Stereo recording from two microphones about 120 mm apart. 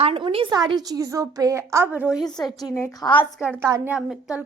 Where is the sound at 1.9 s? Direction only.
10° right (ahead or behind).